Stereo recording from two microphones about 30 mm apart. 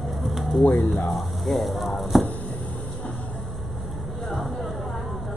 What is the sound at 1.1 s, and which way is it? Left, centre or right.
Speech, centre.